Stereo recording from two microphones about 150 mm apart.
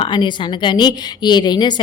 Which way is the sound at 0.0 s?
30° left (ahead or behind).